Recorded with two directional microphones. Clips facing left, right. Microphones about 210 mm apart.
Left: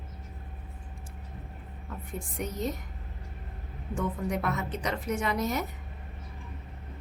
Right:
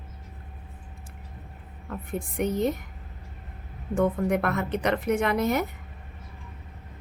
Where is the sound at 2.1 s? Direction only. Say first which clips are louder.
Right 9 dB; 60° right (ahead or behind).